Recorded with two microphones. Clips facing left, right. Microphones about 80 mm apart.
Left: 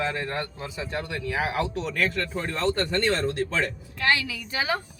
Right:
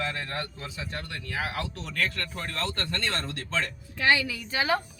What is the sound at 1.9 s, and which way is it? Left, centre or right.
Speech, centre.